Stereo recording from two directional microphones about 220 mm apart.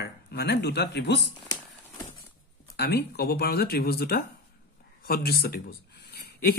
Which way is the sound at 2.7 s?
50° left (ahead or behind).